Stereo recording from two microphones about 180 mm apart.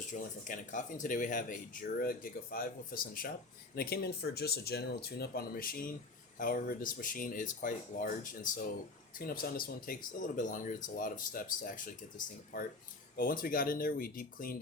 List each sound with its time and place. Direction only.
0.0 s speech: 45° left (ahead or behind)